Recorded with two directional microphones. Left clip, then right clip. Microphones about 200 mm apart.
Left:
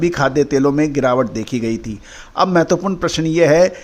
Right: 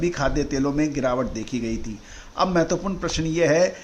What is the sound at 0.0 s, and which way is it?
A man's voice, 40° left (ahead or behind).